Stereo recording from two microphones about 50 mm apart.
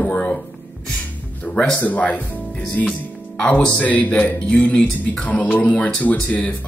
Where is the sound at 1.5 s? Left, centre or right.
Left.